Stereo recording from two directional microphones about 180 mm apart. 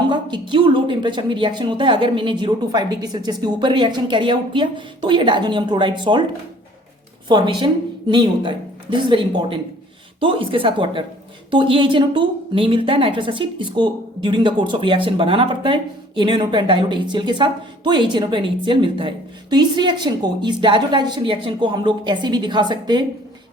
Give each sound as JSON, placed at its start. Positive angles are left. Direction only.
{"t": 0.1, "sound": "a woman's voice", "side_deg": -25}
{"t": 7.3, "sound": "a woman's voice", "side_deg": -25}